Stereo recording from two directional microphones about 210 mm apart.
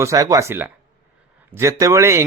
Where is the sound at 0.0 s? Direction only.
15° right (ahead or behind).